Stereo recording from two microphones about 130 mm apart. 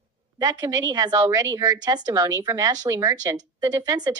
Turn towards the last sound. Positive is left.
turn(degrees=-30)  # may be behind; listen again after turning